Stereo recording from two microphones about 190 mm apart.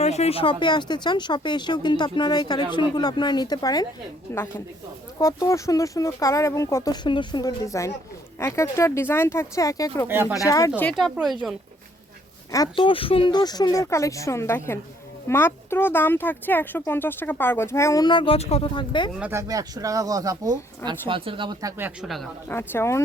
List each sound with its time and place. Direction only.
0.0 s speech: 35° left (ahead or behind); by 10.1 s 15° left (ahead or behind)
10.1 s speech: 10° right (ahead or behind)
10.4 s speech: 15° left (ahead or behind)
10.8 s speech: 5° left (ahead or behind)
12.5 s speech: 20° left (ahead or behind)
19.2 s speech: 15° right (ahead or behind)
21.8 s speech: 10° right (ahead or behind)
22.4 s speech: 10° left (ahead or behind)